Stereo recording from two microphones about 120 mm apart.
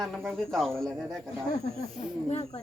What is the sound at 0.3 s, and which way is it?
Speech, centre (ahead or behind).